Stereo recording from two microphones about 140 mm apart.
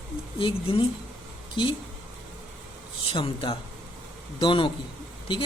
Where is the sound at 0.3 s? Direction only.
40° left (ahead or behind).